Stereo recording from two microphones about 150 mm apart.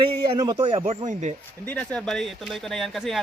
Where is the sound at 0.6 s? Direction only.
40° right (ahead or behind).